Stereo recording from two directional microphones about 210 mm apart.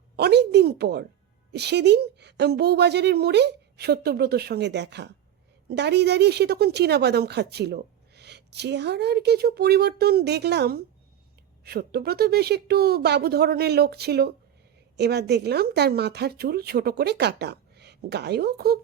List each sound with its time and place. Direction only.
0.2 s a woman's voice: 50° right (ahead or behind)